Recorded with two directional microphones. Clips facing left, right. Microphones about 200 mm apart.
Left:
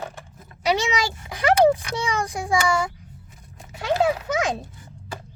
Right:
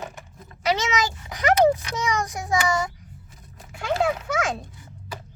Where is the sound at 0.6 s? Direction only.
15° left (ahead or behind).